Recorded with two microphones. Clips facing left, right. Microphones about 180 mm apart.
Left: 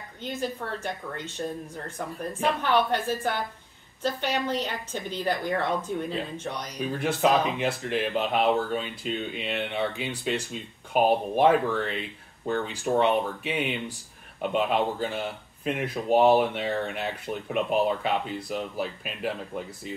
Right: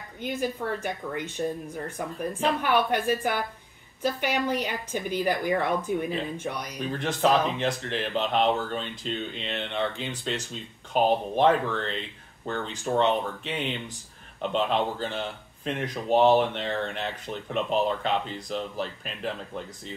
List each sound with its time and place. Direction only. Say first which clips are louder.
0.2 s a woman's voice: right 2 dB; 10° right (ahead or behind)
2.6 s a woman's voice: even; 10° right (ahead or behind)
6.8 s speech: left 1 dB; 5° left (ahead or behind)